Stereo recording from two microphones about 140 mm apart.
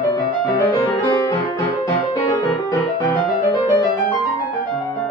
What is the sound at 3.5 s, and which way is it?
Music, 30° left (ahead or behind).